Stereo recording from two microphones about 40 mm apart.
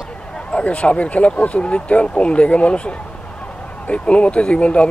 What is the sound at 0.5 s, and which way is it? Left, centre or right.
Speech, left.